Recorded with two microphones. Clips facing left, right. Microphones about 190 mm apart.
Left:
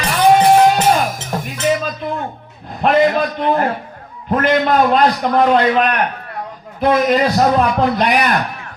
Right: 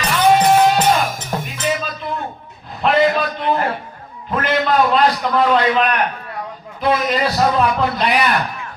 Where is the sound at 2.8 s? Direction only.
50° left (ahead or behind).